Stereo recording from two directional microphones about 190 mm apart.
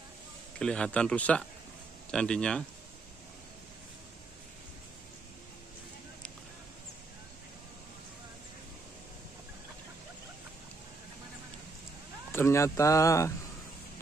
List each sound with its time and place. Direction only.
0.6 s speech: 5° left (ahead or behind)
12.3 s speech: 15° left (ahead or behind)